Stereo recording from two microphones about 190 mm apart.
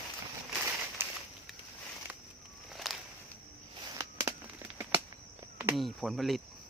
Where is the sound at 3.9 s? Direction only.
15° right (ahead or behind).